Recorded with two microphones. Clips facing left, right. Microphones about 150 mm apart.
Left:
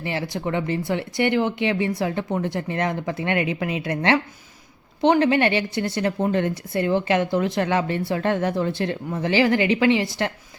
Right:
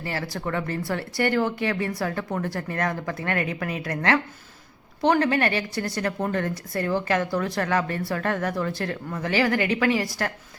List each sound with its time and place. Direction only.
0.0 s a woman's voice: 20° left (ahead or behind)